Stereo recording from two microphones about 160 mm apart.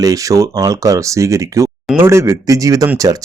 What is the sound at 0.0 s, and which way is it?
Speech, 20° right (ahead or behind).